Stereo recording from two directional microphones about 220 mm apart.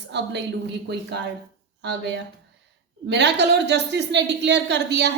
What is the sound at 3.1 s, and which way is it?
A woman's voice, 50° right (ahead or behind).